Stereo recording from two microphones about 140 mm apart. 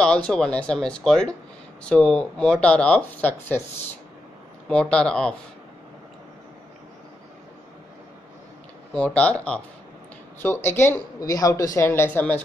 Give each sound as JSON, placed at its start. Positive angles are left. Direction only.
{"t": 0.0, "sound": "speech", "side_deg": 5}
{"t": 4.6, "sound": "speech", "side_deg": 5}
{"t": 8.9, "sound": "speech", "side_deg": 10}